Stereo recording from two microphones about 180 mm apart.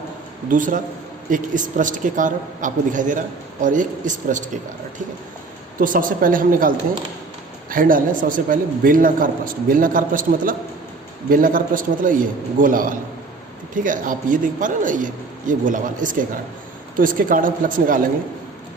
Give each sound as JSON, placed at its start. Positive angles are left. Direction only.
{"t": 0.5, "sound": "a man's voice", "side_deg": -45}
{"t": 5.8, "sound": "a man's voice", "side_deg": -50}